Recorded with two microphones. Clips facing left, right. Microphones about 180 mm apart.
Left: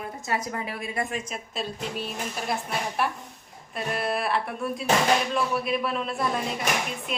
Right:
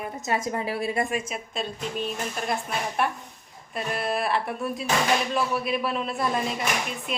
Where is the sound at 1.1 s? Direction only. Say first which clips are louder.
Right 3 dB; 10° right (ahead or behind).